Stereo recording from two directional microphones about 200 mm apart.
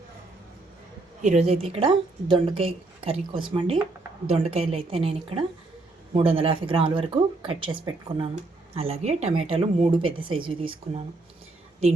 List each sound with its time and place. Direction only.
1.2 s a woman's voice: 35° right (ahead or behind)